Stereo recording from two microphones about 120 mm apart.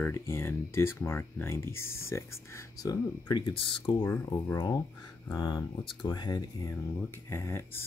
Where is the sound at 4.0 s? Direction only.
30° left (ahead or behind).